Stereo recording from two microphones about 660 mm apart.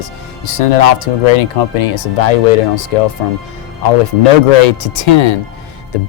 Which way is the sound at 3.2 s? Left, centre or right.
Left.